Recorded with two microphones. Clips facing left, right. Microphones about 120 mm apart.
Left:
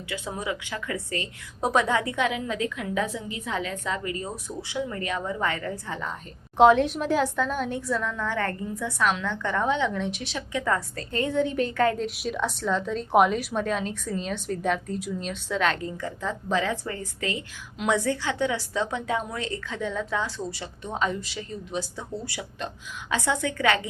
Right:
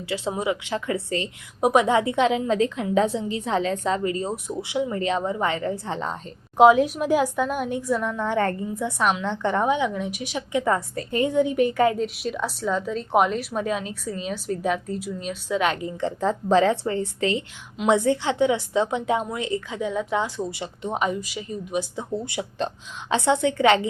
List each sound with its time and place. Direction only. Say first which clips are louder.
0.1 s a woman's voice: right 6 dB; 25° right (ahead or behind)
6.6 s a woman's voice: right 2 dB; 5° right (ahead or behind)
11.9 s a woman's voice: right 2 dB; centre (ahead or behind)
16.0 s a woman's voice: right 7 dB; 25° right (ahead or behind)
16.3 s a woman's voice: right 7 dB; 35° right (ahead or behind)